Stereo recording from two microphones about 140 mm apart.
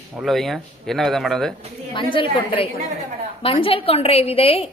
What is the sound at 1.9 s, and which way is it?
A woman's voice, 35° left (ahead or behind).